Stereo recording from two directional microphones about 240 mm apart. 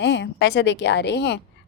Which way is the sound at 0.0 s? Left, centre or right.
Left.